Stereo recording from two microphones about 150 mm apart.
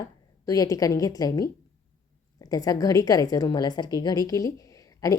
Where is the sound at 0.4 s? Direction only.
25° left (ahead or behind).